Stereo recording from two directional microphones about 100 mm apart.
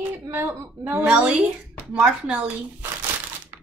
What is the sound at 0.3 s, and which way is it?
A woman's voice, 25° right (ahead or behind).